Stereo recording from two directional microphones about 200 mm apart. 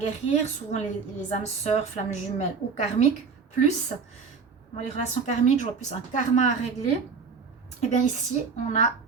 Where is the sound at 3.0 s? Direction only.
30° left (ahead or behind).